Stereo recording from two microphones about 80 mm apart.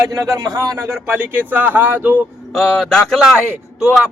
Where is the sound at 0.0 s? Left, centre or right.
Right.